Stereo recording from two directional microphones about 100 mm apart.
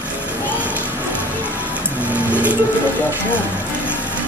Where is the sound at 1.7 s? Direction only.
15° right (ahead or behind).